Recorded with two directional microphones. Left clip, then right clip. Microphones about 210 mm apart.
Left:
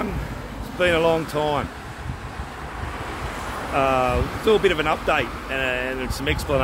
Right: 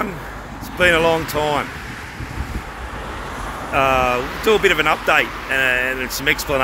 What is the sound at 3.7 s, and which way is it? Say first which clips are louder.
Speech: right 4 dB; centre (ahead or behind).